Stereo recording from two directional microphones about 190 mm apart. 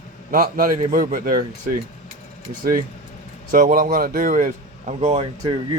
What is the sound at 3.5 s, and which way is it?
Speech, 45° right (ahead or behind).